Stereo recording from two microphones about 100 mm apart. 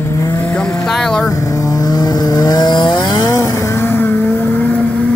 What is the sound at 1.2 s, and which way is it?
Vehicle, 35° left (ahead or behind).